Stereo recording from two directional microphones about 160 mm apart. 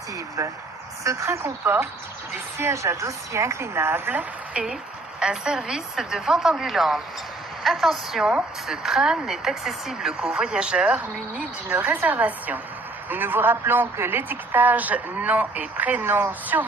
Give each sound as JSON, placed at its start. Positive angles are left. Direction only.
{"t": 0.4, "sound": "a woman's voice", "side_deg": -20}